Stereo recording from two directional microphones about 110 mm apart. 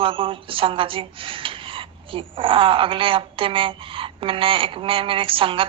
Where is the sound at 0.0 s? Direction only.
55° right (ahead or behind).